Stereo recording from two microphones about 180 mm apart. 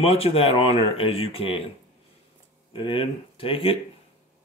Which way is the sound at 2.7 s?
30° left (ahead or behind).